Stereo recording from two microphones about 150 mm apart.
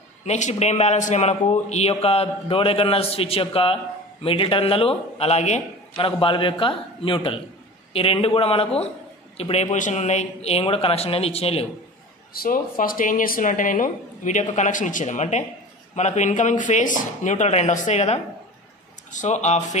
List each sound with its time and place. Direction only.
0.2 s a man's voice: 50° left (ahead or behind)
5.9 s a man's voice: 35° left (ahead or behind)
12.4 s speech: 65° left (ahead or behind); by 19.8 s 50° left (ahead or behind)